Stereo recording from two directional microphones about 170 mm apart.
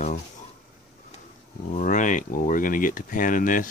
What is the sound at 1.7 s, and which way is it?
Speech, 50° left (ahead or behind).